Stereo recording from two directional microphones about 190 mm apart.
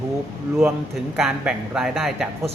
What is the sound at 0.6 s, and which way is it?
A man's voice, centre (ahead or behind).